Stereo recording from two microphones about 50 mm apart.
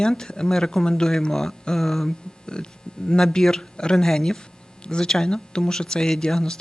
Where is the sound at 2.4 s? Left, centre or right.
Centre.